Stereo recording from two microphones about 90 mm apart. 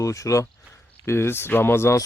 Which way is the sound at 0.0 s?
35° left (ahead or behind).